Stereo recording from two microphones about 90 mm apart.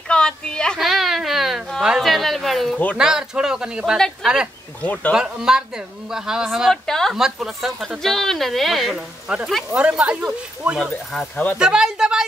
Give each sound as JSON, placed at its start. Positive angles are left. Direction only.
{"t": 0.1, "sound": "a sound", "side_deg": 10}
{"t": 0.7, "sound": "a sound", "side_deg": 0}
{"t": 3.0, "sound": "speech", "side_deg": -5}
{"t": 4.8, "sound": "speech", "side_deg": 15}
{"t": 5.1, "sound": "speech", "side_deg": -5}
{"t": 9.3, "sound": "speech", "side_deg": -10}